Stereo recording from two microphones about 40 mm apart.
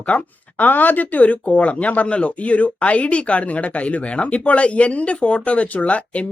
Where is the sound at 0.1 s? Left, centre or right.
Left.